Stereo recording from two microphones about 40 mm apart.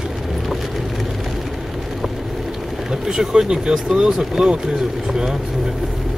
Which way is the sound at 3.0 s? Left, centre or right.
Centre.